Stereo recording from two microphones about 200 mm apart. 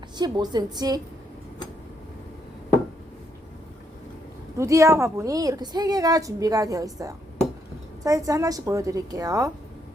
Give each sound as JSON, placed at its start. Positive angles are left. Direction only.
{"t": 0.2, "sound": "a woman's voice", "side_deg": -20}
{"t": 4.5, "sound": "a woman's voice", "side_deg": -15}